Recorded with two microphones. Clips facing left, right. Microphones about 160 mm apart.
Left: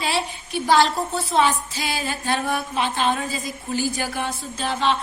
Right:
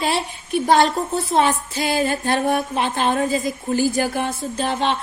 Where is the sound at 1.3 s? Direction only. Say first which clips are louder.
Right 1 dB; 55° right (ahead or behind).